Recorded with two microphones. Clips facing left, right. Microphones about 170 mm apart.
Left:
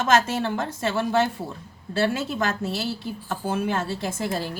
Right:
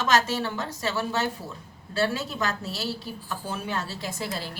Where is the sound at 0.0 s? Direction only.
55° left (ahead or behind).